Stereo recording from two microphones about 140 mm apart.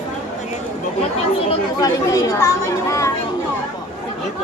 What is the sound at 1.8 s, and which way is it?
Speech, 25° left (ahead or behind).